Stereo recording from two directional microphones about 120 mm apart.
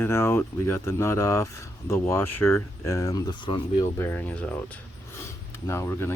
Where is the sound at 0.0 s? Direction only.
20° left (ahead or behind); by 3.8 s 40° left (ahead or behind).